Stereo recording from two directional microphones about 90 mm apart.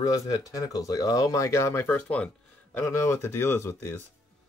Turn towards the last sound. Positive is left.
turn(degrees=30)  # may be behind; listen again after turning